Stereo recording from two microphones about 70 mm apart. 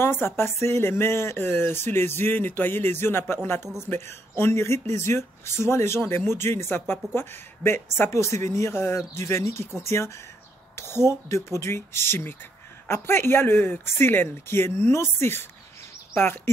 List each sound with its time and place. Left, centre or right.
0.0 s speech: left